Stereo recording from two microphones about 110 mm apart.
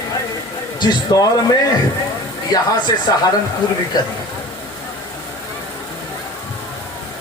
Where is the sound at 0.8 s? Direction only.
40° left (ahead or behind).